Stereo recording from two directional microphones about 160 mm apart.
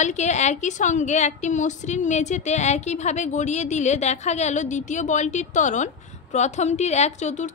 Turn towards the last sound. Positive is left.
turn(degrees=45)  # may be behind; listen again after turning